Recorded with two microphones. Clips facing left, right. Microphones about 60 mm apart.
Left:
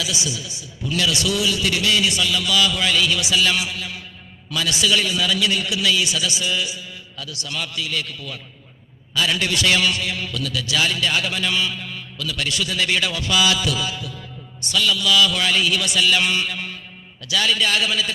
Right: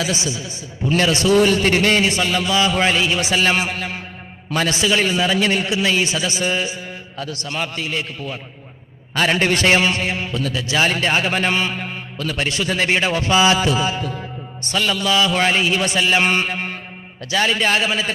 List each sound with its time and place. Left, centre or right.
0.0 s a man's voice: right